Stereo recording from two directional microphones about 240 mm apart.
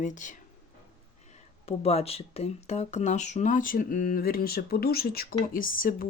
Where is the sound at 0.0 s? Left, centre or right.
Left.